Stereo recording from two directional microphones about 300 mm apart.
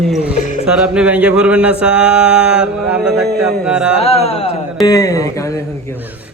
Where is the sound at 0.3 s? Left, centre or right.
Left.